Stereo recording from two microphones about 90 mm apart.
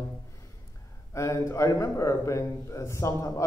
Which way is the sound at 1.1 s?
35° left (ahead or behind).